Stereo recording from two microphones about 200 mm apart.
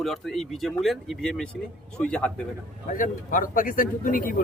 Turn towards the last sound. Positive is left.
turn(degrees=40)  # may be behind; listen again after turning